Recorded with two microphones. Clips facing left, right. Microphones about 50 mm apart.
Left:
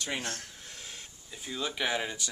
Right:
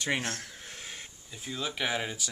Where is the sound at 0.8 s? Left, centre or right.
Right.